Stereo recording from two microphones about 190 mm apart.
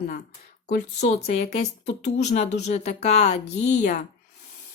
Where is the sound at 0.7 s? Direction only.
35° left (ahead or behind).